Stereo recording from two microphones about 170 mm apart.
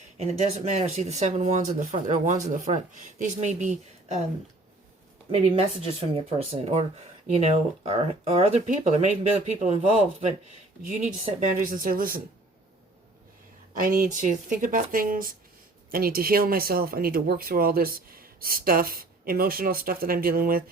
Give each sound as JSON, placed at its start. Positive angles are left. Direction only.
{"t": 0.2, "sound": "speech", "side_deg": -40}
{"t": 5.3, "sound": "speech", "side_deg": -35}
{"t": 13.7, "sound": "speech", "side_deg": -55}